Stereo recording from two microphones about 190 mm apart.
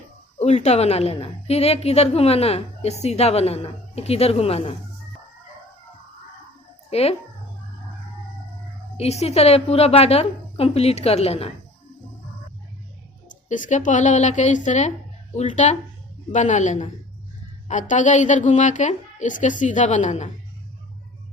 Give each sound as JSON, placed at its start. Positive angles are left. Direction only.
{"t": 0.3, "sound": "a woman's voice", "side_deg": 35}
{"t": 6.9, "sound": "a woman's voice", "side_deg": 30}
{"t": 9.0, "sound": "a woman's voice", "side_deg": 35}
{"t": 13.5, "sound": "a woman's voice", "side_deg": 40}